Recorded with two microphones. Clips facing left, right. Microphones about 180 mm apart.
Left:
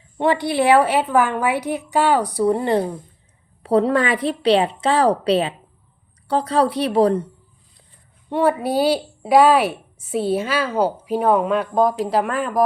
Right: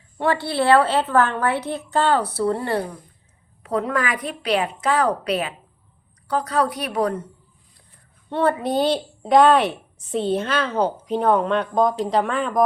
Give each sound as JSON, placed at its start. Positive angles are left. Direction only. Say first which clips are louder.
{"t": 0.2, "sound": "a woman's voice", "louder": "left 3 dB", "side_deg": 15}
{"t": 8.3, "sound": "a woman's voice", "louder": "left 2 dB", "side_deg": 10}